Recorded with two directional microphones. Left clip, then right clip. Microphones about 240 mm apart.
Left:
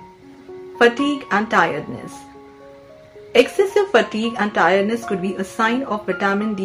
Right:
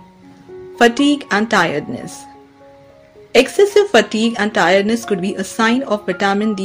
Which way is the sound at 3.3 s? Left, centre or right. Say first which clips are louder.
Right 4 dB; right.